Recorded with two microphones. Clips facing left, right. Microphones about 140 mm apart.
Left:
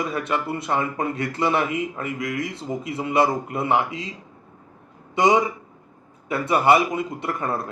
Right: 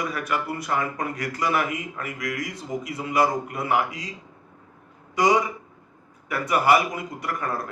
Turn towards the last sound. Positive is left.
turn(degrees=25)  # may be behind; listen again after turning